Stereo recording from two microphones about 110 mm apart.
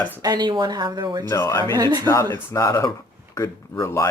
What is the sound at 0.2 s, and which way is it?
Speech, 40° right (ahead or behind).